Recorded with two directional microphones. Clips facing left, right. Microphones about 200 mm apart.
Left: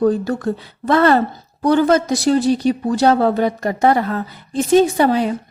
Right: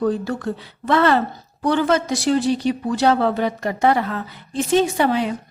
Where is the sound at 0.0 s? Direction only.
40° left (ahead or behind).